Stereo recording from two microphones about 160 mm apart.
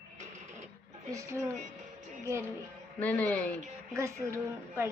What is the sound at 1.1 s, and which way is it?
A woman's voice, 20° right (ahead or behind).